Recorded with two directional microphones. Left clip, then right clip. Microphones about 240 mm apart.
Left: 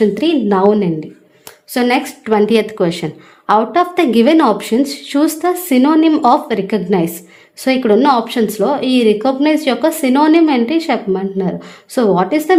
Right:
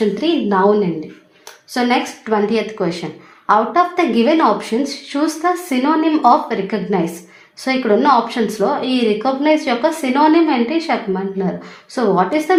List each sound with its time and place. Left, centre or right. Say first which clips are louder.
0.1 s a woman's voice: left 3 dB; left